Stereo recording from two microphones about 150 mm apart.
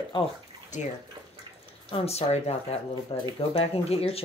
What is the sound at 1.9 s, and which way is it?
Speech, 40° left (ahead or behind).